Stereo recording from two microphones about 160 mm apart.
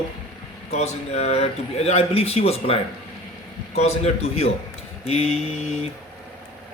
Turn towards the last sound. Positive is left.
turn(degrees=40)  # may be behind; listen again after turning